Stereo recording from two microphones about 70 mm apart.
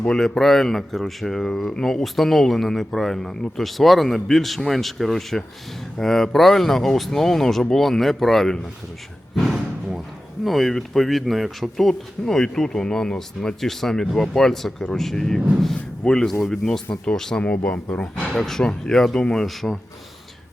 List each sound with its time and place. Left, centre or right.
0.0 s speech: centre
9.3 s a sound: centre
10.4 s a man's voice: centre